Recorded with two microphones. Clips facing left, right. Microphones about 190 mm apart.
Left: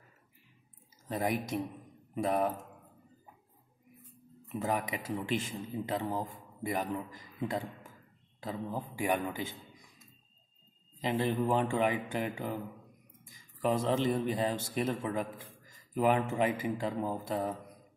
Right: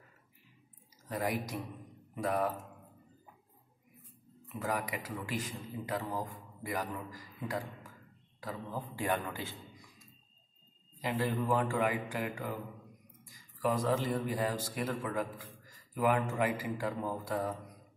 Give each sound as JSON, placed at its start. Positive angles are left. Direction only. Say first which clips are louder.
{"t": 1.0, "sound": "a man's voice", "louder": "left 2 dB", "side_deg": 20}
{"t": 4.5, "sound": "a man's voice", "louder": "left 3 dB", "side_deg": 20}
{"t": 8.9, "sound": "a man's voice", "louder": "left 2 dB", "side_deg": 15}
{"t": 11.0, "sound": "a man's voice", "louder": "left 3 dB", "side_deg": 20}